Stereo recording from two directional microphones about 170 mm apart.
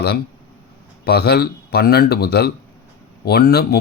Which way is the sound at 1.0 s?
70° left (ahead or behind).